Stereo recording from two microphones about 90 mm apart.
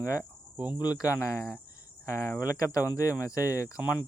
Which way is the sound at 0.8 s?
45° left (ahead or behind).